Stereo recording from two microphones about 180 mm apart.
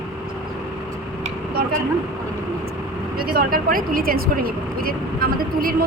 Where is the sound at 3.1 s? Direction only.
55° right (ahead or behind).